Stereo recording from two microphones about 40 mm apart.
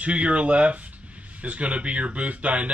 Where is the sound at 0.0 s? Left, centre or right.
Right.